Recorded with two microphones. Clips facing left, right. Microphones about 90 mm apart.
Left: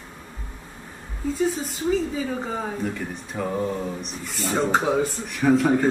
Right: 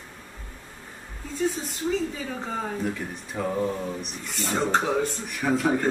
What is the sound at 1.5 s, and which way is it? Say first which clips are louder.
A man's voice: left 4 dB; centre (ahead or behind).